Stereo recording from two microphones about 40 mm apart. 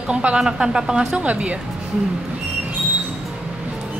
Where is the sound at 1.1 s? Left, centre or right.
Right.